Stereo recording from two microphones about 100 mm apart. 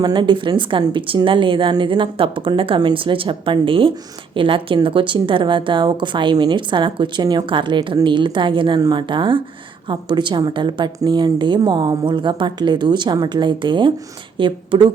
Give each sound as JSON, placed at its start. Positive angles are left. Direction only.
{"t": 0.0, "sound": "a woman's voice", "side_deg": -45}